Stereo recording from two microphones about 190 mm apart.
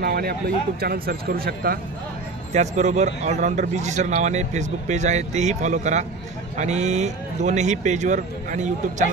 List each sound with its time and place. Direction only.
0.0 s speech: 55° right (ahead or behind)
2.5 s speech: 35° right (ahead or behind)